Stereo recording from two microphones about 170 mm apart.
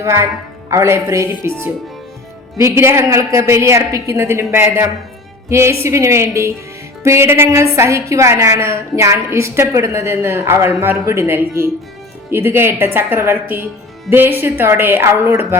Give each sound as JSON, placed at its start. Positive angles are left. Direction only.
{"t": 0.0, "sound": "a woman's voice", "side_deg": -15}